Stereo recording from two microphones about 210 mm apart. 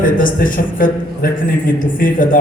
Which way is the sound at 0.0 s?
40° left (ahead or behind).